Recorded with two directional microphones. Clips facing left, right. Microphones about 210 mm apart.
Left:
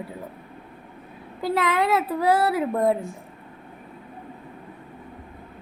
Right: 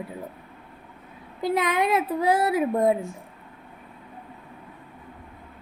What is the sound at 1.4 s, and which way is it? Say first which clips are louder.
Speech: even; 15° right (ahead or behind).